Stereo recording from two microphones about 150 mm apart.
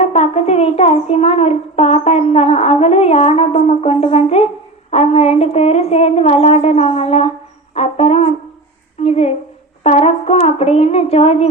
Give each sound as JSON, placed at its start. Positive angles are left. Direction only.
{"t": 0.0, "sound": "a child's voice", "side_deg": 45}